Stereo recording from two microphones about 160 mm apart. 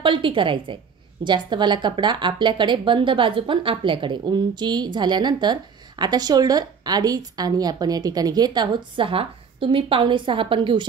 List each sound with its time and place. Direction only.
0.0 s a woman's voice: 30° right (ahead or behind)